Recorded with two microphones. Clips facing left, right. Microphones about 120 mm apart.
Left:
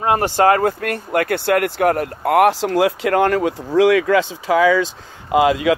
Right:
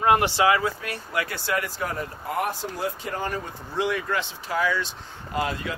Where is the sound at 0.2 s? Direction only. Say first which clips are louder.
Left 7 dB; 50° left (ahead or behind).